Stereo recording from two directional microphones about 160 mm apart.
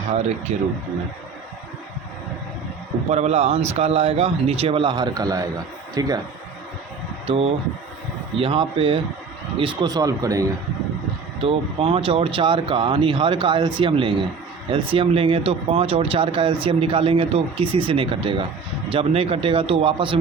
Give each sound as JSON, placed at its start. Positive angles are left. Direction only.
{"t": 0.5, "sound": "speech", "side_deg": -45}
{"t": 3.1, "sound": "speech", "side_deg": -45}
{"t": 7.3, "sound": "speech", "side_deg": -40}
{"t": 11.4, "sound": "speech", "side_deg": -35}